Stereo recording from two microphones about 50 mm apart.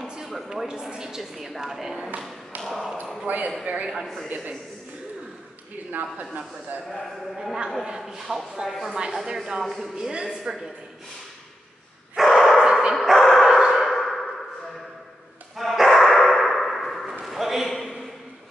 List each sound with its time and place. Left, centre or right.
0.0 s a sound: centre
0.5 s speech: centre
3.3 s a man's voice: right
4.0 s a woman's voice: centre
5.9 s a man's voice: right
6.9 s speech: centre
7.3 s speech: centre
9.6 s speech: centre
9.9 s speech: centre
12.2 s bow-wow: centre
13.5 s a sound: centre
13.9 s ping: centre
15.5 s bow-wow: centre
17.2 s a sound: centre